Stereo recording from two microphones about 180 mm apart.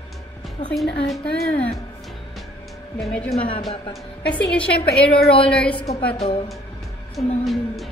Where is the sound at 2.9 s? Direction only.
5° left (ahead or behind).